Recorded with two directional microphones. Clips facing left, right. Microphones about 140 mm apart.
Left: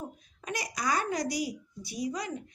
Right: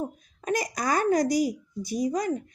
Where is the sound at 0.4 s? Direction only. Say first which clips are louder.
Right 6 dB; 45° right (ahead or behind).